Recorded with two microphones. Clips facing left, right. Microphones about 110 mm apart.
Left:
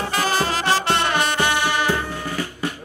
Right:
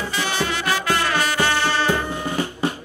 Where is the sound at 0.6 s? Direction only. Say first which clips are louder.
Left 1 dB; 25° left (ahead or behind).